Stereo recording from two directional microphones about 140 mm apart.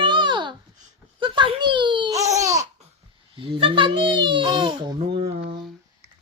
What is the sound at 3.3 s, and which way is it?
A child's voice, 40° right (ahead or behind).